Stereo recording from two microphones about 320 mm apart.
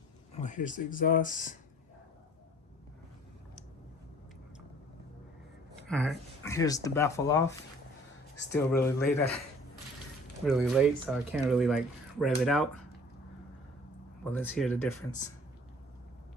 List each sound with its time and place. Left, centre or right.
0.3 s speech: left
5.9 s speech: centre
8.5 s speech: centre
10.4 s speech: centre
14.3 s speech: centre